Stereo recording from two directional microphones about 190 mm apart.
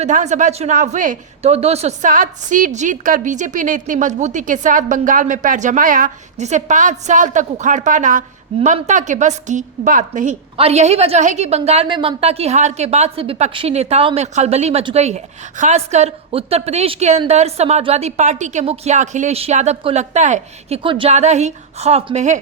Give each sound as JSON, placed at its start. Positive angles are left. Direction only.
{"t": 0.0, "sound": "a woman's voice", "side_deg": -40}